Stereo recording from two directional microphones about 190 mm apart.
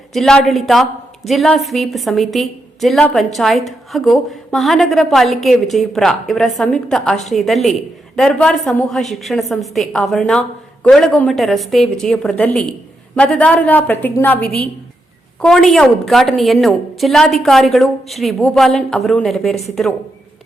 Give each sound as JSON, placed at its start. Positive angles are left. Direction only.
{"t": 0.1, "sound": "a woman's voice", "side_deg": 0}